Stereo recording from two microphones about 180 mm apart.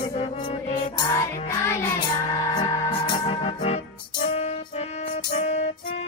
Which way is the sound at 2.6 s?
30° left (ahead or behind).